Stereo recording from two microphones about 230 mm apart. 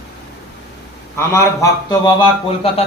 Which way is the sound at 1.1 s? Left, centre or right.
Centre.